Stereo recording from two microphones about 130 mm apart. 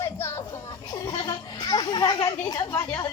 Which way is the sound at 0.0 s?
20° left (ahead or behind).